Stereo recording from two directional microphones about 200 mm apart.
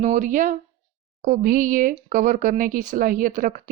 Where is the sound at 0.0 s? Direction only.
40° right (ahead or behind).